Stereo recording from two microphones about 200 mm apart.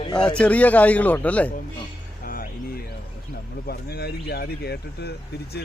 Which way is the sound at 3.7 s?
50° left (ahead or behind).